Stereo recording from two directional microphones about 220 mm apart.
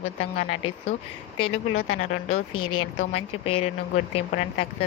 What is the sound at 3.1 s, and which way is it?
Speech, 25° left (ahead or behind).